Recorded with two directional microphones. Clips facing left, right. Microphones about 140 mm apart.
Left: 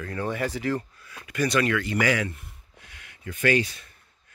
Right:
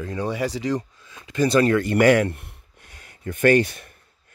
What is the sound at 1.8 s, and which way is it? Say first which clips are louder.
Speech: right 8 dB; 55° right (ahead or behind).